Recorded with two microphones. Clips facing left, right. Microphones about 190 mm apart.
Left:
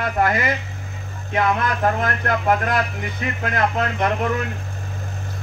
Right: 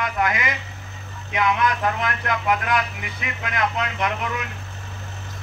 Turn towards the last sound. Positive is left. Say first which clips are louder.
# left 5 dB
turn(degrees=45)  # may be behind; listen again after turning